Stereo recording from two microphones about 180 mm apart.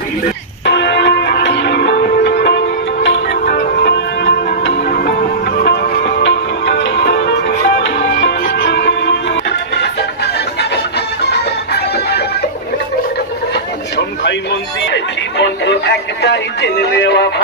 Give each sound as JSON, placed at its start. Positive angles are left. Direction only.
{"t": 0.7, "sound": "church bell", "side_deg": 75}
{"t": 3.1, "sound": "music", "side_deg": 80}
{"t": 13.9, "sound": "a sound", "side_deg": 75}